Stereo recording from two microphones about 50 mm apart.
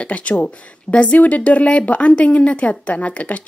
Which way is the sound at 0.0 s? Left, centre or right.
Left.